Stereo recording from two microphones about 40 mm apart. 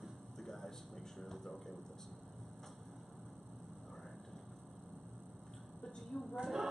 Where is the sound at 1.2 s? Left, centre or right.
Centre.